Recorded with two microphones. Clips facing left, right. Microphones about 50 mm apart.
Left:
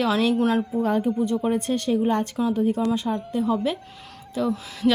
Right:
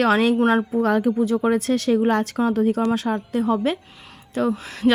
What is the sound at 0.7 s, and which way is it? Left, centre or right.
A woman's voice, right.